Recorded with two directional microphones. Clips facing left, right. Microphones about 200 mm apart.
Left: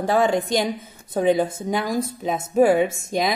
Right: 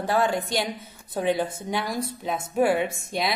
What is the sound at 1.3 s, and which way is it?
A woman's voice, 45° left (ahead or behind).